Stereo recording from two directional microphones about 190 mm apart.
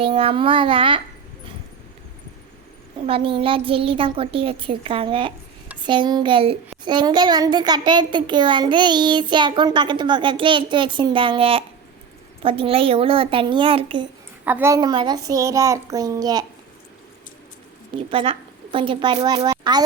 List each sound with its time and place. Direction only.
0.0 s a child's voice: 30° right (ahead or behind)
3.1 s a child's voice: 25° right (ahead or behind)
14.4 s a child's voice: 10° right (ahead or behind)
18.1 s a child's voice: 30° right (ahead or behind)